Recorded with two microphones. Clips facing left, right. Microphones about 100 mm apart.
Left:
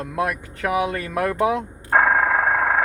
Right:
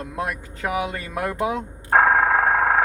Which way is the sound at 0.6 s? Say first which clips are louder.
Left 3 dB; 25° right (ahead or behind).